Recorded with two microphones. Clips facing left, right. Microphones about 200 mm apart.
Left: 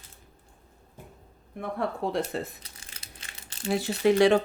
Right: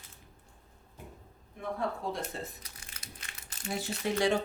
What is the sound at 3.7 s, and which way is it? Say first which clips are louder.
Speech: left 10 dB; 75° left (ahead or behind).